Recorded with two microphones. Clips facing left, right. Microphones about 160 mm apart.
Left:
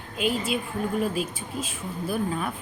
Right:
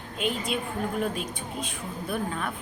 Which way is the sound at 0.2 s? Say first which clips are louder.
Left 3 dB; 5° left (ahead or behind).